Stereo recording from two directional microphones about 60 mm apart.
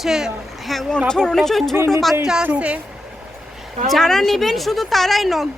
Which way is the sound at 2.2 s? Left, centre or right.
Centre.